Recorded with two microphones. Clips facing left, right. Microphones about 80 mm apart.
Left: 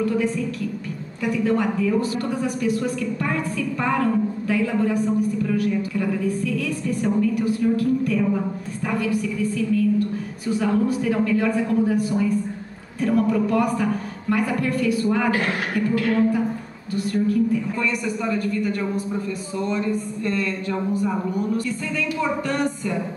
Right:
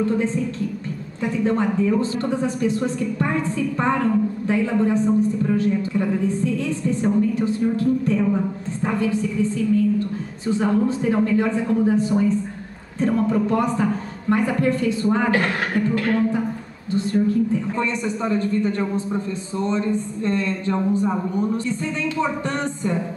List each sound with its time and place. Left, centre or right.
0.0 s a woman's voice: right